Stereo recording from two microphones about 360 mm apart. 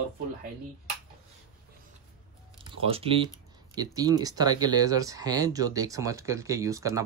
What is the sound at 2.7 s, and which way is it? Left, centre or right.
Speech, centre.